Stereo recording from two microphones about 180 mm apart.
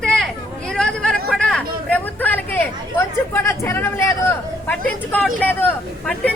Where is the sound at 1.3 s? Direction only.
5° left (ahead or behind).